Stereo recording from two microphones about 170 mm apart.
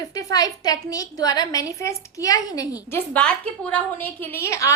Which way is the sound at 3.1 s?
5° left (ahead or behind).